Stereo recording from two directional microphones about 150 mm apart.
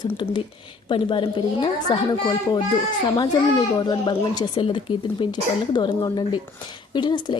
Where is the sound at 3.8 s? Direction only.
30° left (ahead or behind).